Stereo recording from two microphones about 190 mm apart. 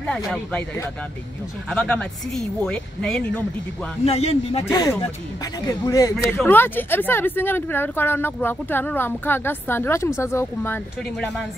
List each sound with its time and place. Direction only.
0.0 s speech: 5° left (ahead or behind)
4.0 s a man's voice: 30° left (ahead or behind)
4.6 s speech: 20° left (ahead or behind)